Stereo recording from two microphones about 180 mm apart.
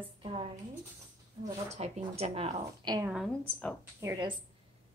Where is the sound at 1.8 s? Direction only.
35° right (ahead or behind).